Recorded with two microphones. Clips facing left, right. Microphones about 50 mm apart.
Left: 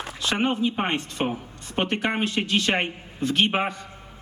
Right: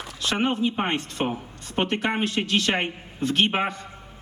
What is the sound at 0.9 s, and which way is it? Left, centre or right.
Speech, left.